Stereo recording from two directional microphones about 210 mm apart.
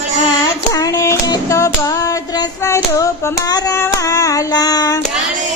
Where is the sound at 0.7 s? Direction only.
15° left (ahead or behind).